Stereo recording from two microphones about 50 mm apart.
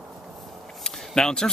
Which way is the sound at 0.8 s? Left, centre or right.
Centre.